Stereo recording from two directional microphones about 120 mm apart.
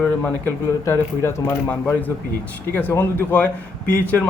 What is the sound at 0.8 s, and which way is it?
A man's voice, 25° left (ahead or behind).